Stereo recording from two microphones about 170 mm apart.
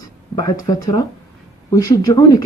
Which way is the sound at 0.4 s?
20° left (ahead or behind).